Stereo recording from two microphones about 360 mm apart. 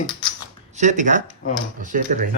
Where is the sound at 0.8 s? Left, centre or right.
Centre.